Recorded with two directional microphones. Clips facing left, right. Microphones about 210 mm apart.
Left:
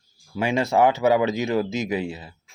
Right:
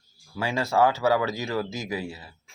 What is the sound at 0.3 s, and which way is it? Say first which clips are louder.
Speech: left 3 dB; 20° left (ahead or behind).